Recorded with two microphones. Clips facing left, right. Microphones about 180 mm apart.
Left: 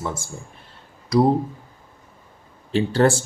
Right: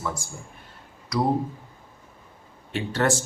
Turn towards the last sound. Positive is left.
turn(degrees=30)  # may be behind; listen again after turning